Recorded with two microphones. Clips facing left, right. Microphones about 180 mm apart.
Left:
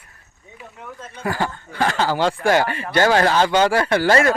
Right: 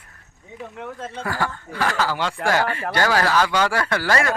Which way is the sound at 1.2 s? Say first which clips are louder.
Left 4 dB; 20° left (ahead or behind).